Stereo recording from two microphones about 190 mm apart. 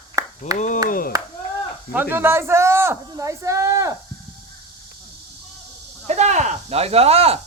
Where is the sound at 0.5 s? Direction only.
40° left (ahead or behind).